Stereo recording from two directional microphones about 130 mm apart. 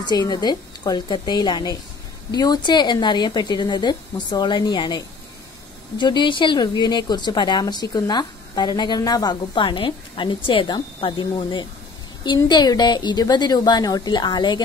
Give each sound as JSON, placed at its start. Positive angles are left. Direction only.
{"t": 0.0, "sound": "a woman's voice", "side_deg": 30}